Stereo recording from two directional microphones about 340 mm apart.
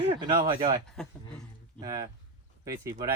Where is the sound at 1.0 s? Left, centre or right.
Centre.